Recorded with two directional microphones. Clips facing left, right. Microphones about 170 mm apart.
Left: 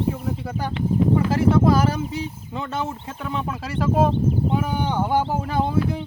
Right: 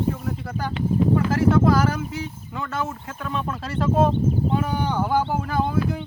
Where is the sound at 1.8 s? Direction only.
30° left (ahead or behind).